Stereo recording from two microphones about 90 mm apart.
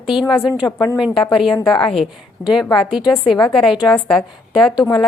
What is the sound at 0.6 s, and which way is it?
Speech, 25° left (ahead or behind).